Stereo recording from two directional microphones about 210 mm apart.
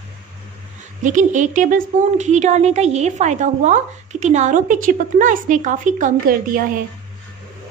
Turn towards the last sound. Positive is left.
turn(degrees=-40)  # may be behind; listen again after turning